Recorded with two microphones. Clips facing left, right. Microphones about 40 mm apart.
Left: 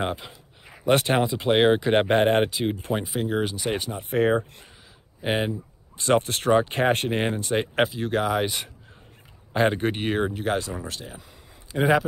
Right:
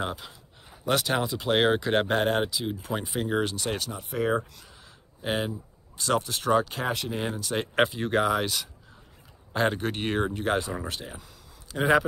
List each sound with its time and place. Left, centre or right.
0.0 s speech: left
1.2 s speech: centre; by 3.0 s left
3.0 s speech: centre
3.7 s speech: left
5.9 s speech: left
7.7 s speech: centre
9.5 s speech: centre
9.9 s speech: centre
11.7 s speech: centre